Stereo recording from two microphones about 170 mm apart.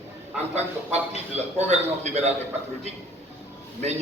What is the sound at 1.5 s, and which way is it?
Speech, 40° right (ahead or behind).